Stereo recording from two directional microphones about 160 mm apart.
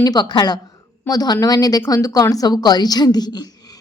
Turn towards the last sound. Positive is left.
turn(degrees=25)  # may be behind; listen again after turning